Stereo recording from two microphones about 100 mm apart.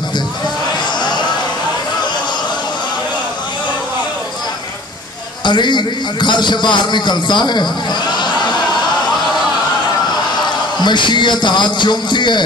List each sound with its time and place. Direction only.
5.4 s a man's voice: 50° left (ahead or behind)
10.8 s a man's voice: 50° left (ahead or behind)